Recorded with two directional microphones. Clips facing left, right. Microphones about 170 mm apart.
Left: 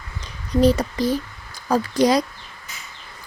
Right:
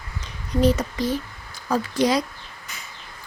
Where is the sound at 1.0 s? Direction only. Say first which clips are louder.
Left 3 dB; 35° left (ahead or behind).